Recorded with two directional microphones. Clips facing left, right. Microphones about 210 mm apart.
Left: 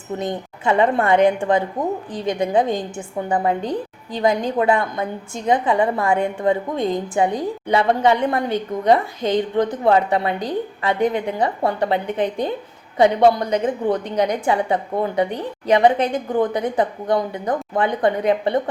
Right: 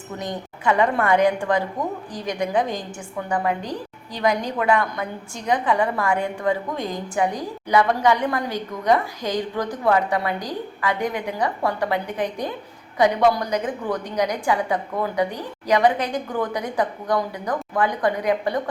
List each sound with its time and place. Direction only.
0.2 s a woman's voice: 25° left (ahead or behind)